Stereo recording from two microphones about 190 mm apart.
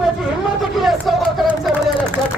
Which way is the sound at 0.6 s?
Centre (ahead or behind).